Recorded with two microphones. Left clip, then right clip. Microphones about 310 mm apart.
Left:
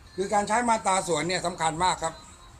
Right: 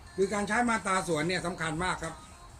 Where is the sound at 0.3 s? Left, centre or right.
Centre.